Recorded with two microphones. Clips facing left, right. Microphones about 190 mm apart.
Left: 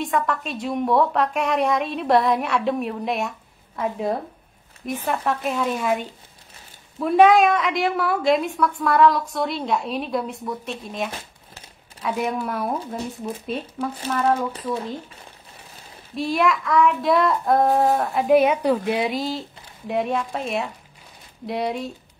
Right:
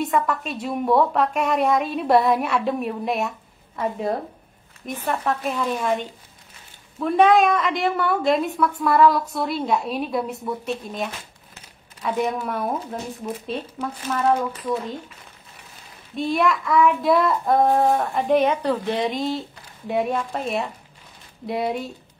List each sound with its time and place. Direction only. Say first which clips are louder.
0.0 s a woman's voice: right 1 dB; centre (ahead or behind)
14.5 s speech: right 2 dB; 30° left (ahead or behind)
16.2 s a woman's voice: even; centre (ahead or behind)